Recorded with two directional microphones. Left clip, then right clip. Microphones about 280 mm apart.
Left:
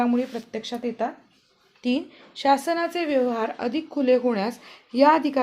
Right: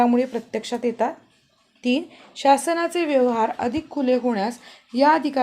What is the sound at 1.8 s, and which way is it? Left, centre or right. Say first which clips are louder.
A woman's voice: right 3 dB; centre.